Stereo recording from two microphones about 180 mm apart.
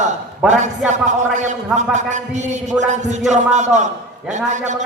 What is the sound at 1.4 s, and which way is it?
A man's voice, 40° right (ahead or behind).